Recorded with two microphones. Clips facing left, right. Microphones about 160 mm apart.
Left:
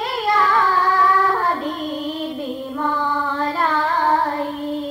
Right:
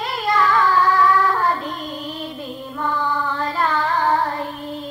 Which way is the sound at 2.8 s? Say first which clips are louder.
Even; 30° left (ahead or behind).